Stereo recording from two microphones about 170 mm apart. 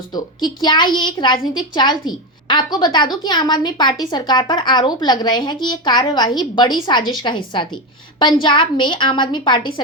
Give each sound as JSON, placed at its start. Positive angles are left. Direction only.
{"t": 0.1, "sound": "a woman's voice", "side_deg": 25}